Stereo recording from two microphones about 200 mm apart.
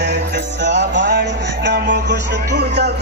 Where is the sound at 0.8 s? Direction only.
60° right (ahead or behind).